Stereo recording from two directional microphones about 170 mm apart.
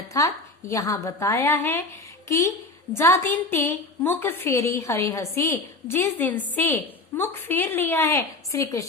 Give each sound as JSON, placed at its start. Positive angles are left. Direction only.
{"t": 0.1, "sound": "a woman's voice", "side_deg": 20}
{"t": 2.9, "sound": "a woman's voice", "side_deg": 15}